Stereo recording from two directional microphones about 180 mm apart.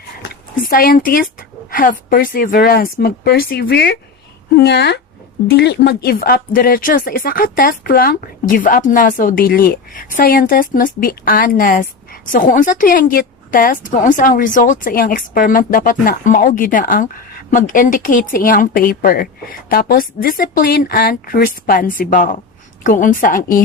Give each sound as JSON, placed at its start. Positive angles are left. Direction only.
{"t": 0.6, "sound": "speech", "side_deg": 55}